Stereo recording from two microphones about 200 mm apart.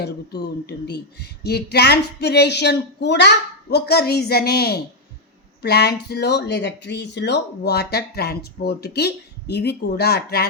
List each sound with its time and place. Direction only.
0.0 s speech: 55° left (ahead or behind)